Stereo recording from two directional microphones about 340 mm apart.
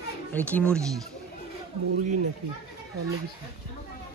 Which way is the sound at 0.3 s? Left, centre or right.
Centre.